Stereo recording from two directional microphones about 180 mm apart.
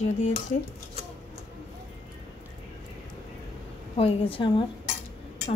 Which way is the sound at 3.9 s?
30° left (ahead or behind).